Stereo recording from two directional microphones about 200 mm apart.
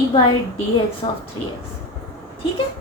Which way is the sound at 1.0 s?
20° left (ahead or behind).